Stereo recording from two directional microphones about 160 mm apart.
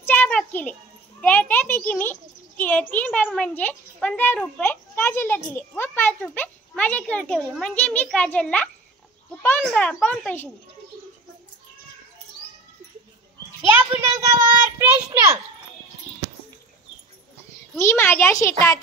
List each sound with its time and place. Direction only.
0.0 s a sound: 10° left (ahead or behind)
1.2 s a child's voice: 10° left (ahead or behind)
13.7 s a child's voice: 15° right (ahead or behind)
17.7 s a child's voice: 15° left (ahead or behind)